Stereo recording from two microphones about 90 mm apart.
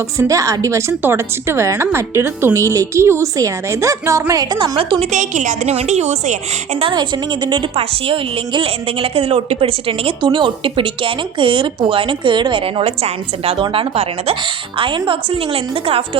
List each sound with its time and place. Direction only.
0.2 s speech: 35° right (ahead or behind)
4.5 s a woman's voice: 60° right (ahead or behind)
6.9 s a woman's voice: 60° right (ahead or behind)
8.0 s a woman's voice: 85° right
10.2 s a woman's voice: 65° right (ahead or behind); by 16.0 s 90° right